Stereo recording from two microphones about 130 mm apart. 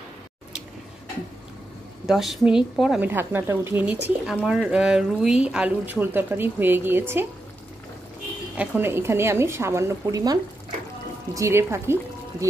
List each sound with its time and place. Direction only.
2.0 s a woman's voice: centre (ahead or behind)
3.0 s speech: 15° right (ahead or behind)
8.5 s a woman's voice: 15° right (ahead or behind)